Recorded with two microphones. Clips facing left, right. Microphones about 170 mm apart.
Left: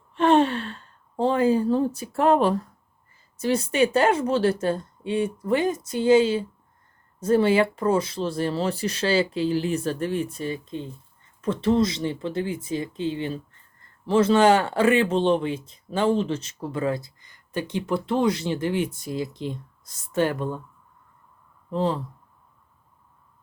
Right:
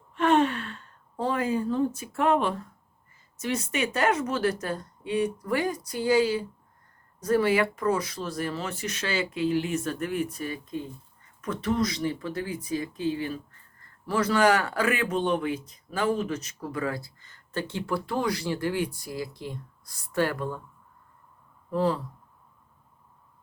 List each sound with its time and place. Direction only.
0.1 s speech: 30° left (ahead or behind)
21.7 s speech: 25° left (ahead or behind)